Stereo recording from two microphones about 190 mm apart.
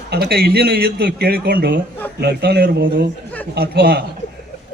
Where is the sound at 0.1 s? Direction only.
55° right (ahead or behind).